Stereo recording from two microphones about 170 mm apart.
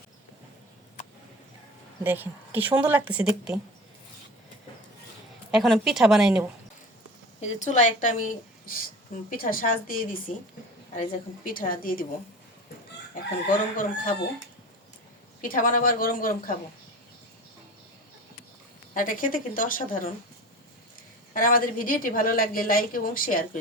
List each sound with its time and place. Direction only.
2.0 s a woman's voice: 10° right (ahead or behind)
5.5 s a woman's voice: centre (ahead or behind)
7.4 s a woman's voice: 45° left (ahead or behind)
13.7 s a woman's voice: 55° left (ahead or behind)
15.4 s a woman's voice: 55° left (ahead or behind)
18.9 s a woman's voice: 50° left (ahead or behind)
21.3 s a woman's voice: 55° left (ahead or behind)